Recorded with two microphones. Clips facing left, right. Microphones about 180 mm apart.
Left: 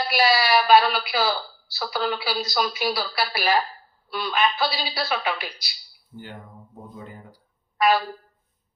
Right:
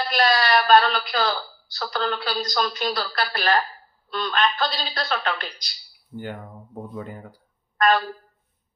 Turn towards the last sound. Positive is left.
turn(degrees=5)  # may be behind; listen again after turning